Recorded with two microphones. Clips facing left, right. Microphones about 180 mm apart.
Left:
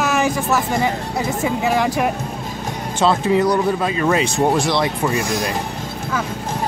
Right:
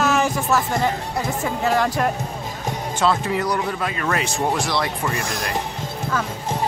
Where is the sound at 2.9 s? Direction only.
25° left (ahead or behind).